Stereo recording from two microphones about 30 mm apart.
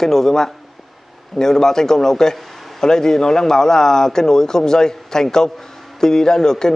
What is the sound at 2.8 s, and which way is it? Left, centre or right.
A man's voice, centre.